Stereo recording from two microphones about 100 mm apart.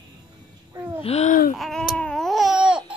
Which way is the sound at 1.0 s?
90° left.